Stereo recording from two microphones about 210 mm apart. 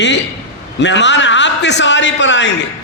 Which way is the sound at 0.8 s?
55° left (ahead or behind).